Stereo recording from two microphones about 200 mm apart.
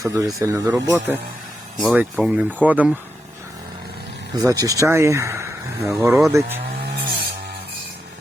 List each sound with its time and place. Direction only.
0.0 s speech: 15° right (ahead or behind)
4.4 s speech: 20° right (ahead or behind)